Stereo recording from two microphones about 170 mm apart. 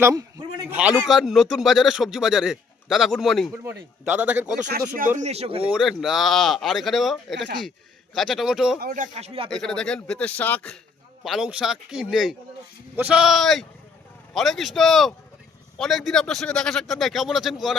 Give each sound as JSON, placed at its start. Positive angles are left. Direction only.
{"t": 0.0, "sound": "a man's voice", "side_deg": -20}
{"t": 0.7, "sound": "speech", "side_deg": -5}
{"t": 3.6, "sound": "speech", "side_deg": -15}
{"t": 4.9, "sound": "speech", "side_deg": -50}
{"t": 5.7, "sound": "speech", "side_deg": 0}
{"t": 8.8, "sound": "speech", "side_deg": -50}
{"t": 9.5, "sound": "speech", "side_deg": 5}
{"t": 11.2, "sound": "speech", "side_deg": -5}